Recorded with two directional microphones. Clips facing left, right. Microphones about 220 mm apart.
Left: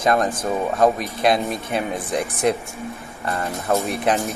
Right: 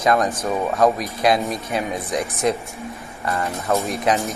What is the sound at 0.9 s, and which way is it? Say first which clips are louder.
Speech: even; centre (ahead or behind).